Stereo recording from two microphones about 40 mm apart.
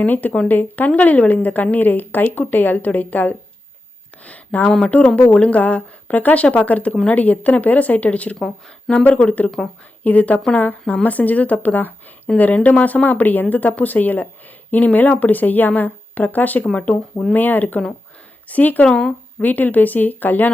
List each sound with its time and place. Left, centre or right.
0.0 s a woman's voice: left
8.9 s speech: centre
9.2 s a woman's voice: left
16.7 s speech: left
17.3 s a woman's voice: left
18.9 s speech: centre
19.4 s a woman's voice: left